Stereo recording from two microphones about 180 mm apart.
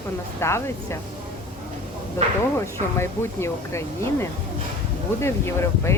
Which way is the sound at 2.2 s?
15° left (ahead or behind).